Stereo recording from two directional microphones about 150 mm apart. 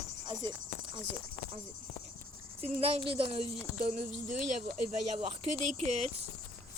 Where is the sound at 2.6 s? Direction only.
40° right (ahead or behind).